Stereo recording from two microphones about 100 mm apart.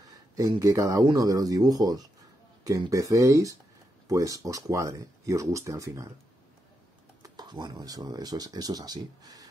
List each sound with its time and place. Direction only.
0.1 s speech: 35° right (ahead or behind)
7.2 s speech: 45° right (ahead or behind)